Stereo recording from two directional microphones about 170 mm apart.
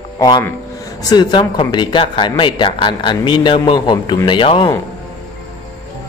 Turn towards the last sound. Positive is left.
turn(degrees=30)  # may be behind; listen again after turning